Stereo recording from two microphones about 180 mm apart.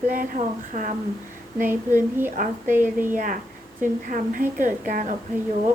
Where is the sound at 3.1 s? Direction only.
45° right (ahead or behind).